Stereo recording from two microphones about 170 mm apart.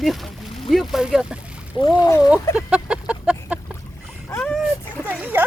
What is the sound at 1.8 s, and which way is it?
Speech, 20° left (ahead or behind).